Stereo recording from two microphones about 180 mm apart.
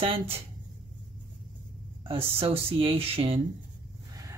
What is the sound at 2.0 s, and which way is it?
Speech, 30° right (ahead or behind).